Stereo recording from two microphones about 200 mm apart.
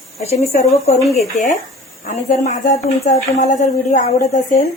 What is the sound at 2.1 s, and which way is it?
Speech, 35° left (ahead or behind).